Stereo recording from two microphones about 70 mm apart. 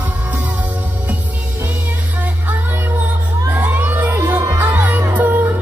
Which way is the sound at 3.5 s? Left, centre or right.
Right.